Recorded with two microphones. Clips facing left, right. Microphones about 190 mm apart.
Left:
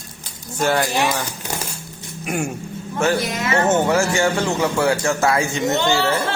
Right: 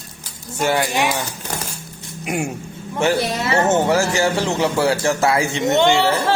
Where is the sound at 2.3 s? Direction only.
15° right (ahead or behind).